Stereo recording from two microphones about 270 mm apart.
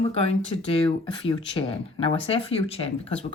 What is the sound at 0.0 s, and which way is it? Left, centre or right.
Speech, left.